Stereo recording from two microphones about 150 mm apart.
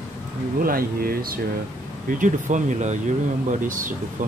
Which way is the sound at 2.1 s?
60° right (ahead or behind).